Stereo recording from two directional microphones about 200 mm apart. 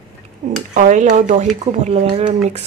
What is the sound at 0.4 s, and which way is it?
Speech, 40° right (ahead or behind).